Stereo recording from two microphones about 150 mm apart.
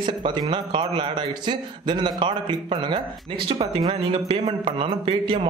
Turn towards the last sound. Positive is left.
turn(degrees=-35)  # may be behind; listen again after turning